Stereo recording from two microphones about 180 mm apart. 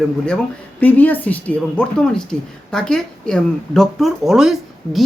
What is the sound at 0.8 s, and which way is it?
Speech, 10° left (ahead or behind).